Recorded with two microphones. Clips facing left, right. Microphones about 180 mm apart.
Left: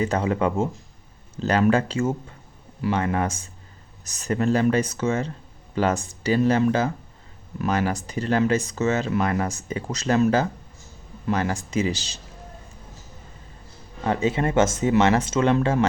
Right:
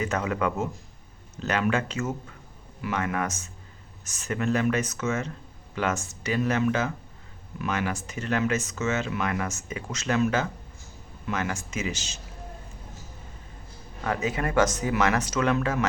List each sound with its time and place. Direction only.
0.0 s speech: 30° left (ahead or behind)
14.0 s speech: 30° left (ahead or behind)